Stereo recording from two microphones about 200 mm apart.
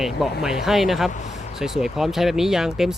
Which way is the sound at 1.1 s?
35° left (ahead or behind).